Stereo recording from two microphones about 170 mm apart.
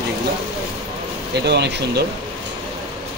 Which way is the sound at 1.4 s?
75° right (ahead or behind).